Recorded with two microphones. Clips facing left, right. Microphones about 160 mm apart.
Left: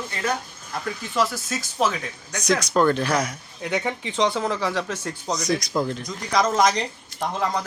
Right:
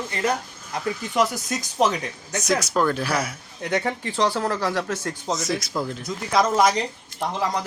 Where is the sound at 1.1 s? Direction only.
20° right (ahead or behind).